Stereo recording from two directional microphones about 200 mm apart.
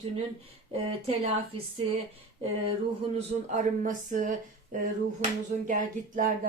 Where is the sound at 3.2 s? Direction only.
40° right (ahead or behind).